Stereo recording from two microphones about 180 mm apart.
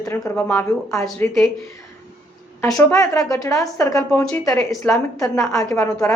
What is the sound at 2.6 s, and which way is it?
A woman's voice, 15° left (ahead or behind).